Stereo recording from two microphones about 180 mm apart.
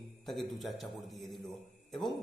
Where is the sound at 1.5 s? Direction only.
Centre (ahead or behind).